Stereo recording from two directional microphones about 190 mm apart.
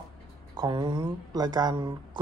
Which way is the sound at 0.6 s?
20° right (ahead or behind).